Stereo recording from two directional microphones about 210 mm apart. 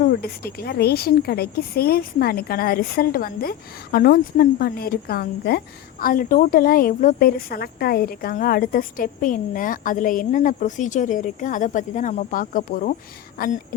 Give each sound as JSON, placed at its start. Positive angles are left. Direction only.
{"t": 0.0, "sound": "speech", "side_deg": 45}